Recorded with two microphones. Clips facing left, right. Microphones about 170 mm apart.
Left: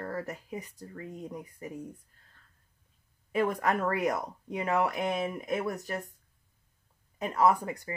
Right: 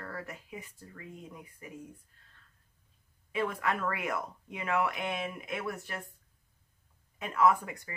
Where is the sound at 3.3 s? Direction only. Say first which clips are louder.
Left 4 dB; 40° left (ahead or behind).